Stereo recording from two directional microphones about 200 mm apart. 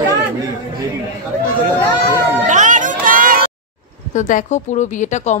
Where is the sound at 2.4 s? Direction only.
40° right (ahead or behind).